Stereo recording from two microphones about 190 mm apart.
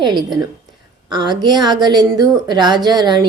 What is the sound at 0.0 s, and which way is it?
A woman's voice, 25° right (ahead or behind).